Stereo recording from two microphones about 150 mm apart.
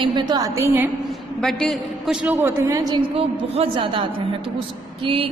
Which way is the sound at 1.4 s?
Centre (ahead or behind).